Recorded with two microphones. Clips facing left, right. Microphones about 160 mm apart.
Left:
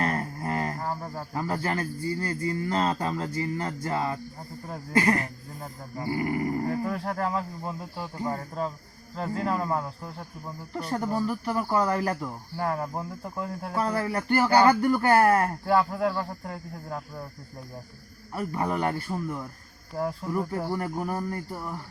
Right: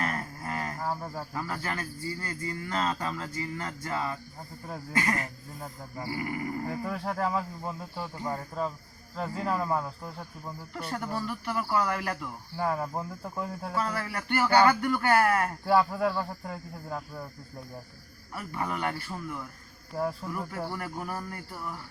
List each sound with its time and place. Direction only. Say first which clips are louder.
0.0 s a sound: left 5 dB; 35° left (ahead or behind)
0.8 s cricket: left 1 dB; centre (ahead or behind)
1.3 s speech: left 8 dB; 30° left (ahead or behind)
6.8 s speech: left 2 dB; centre (ahead or behind)
10.8 s speech: left 6 dB; 35° left (ahead or behind)
12.5 s speech: even; centre (ahead or behind)
13.7 s speech: left 5 dB; 35° left (ahead or behind)
15.6 s speech: left 1 dB; centre (ahead or behind)
18.3 s speech: left 5 dB; 35° left (ahead or behind)
20.0 s speech: left 1 dB; 5° left (ahead or behind)
21.0 s speech: left 6 dB; 30° left (ahead or behind)